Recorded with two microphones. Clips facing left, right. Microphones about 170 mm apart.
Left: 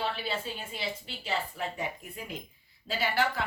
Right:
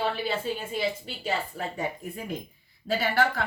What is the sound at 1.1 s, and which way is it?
Speech, 45° right (ahead or behind).